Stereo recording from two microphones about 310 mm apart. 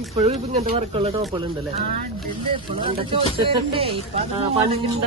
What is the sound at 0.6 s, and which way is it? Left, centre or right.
Speech, centre.